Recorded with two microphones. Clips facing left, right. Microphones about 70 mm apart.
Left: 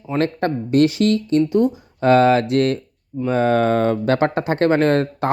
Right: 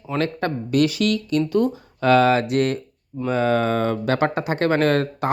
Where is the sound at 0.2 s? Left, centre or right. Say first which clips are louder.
Left 4 dB; left.